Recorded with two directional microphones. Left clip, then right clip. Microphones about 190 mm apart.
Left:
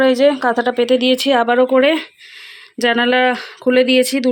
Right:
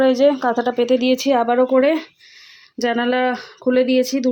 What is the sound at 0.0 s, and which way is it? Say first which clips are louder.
A woman's voice: left 2 dB; centre (ahead or behind).